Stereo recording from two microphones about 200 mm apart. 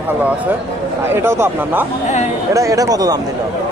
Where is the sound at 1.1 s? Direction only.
10° right (ahead or behind).